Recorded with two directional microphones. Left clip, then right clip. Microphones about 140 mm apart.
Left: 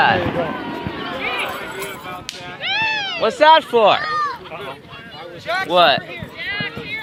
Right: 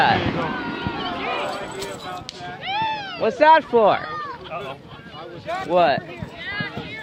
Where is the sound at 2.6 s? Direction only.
20° right (ahead or behind).